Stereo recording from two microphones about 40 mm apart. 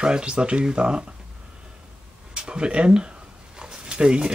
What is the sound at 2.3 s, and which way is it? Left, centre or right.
Speech, right.